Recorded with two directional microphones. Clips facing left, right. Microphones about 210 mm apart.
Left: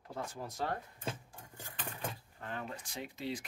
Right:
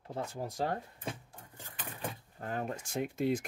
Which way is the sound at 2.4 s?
40° right (ahead or behind).